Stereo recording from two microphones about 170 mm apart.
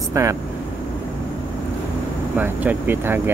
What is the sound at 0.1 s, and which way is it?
Speech, 15° right (ahead or behind).